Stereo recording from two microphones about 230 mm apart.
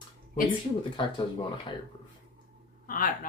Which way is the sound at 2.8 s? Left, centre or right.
Left.